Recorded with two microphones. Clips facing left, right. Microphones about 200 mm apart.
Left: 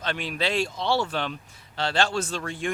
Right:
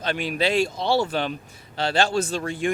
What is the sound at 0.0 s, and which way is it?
Speech, 10° right (ahead or behind).